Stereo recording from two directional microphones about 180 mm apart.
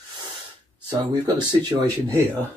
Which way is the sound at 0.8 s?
25° right (ahead or behind).